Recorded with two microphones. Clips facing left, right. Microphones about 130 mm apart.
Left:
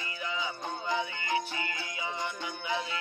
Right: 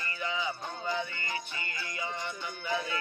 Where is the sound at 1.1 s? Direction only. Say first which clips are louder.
Left 6 dB; 90° left.